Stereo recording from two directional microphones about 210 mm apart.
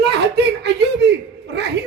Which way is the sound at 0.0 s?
55° right (ahead or behind).